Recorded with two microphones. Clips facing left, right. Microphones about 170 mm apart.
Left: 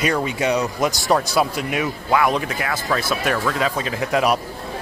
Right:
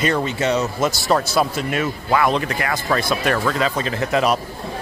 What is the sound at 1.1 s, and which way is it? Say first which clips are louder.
A man's voice: even; 5° left (ahead or behind).